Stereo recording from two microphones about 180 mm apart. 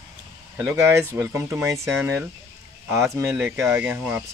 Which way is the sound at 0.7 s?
15° right (ahead or behind).